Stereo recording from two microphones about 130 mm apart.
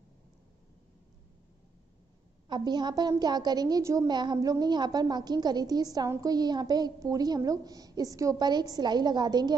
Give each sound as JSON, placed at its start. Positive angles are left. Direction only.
{"t": 2.4, "sound": "a woman's voice", "side_deg": -35}
{"t": 4.1, "sound": "a woman's voice", "side_deg": -35}